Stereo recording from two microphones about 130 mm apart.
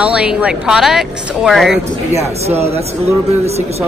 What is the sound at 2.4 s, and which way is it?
Speech, 55° right (ahead or behind).